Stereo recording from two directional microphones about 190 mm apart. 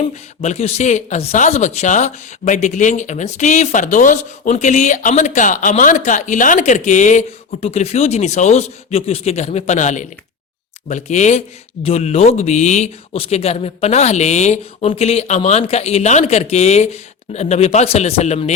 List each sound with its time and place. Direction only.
0.4 s speech: 35° left (ahead or behind)